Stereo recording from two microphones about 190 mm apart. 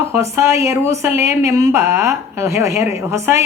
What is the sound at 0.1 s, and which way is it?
A woman's voice, 15° right (ahead or behind).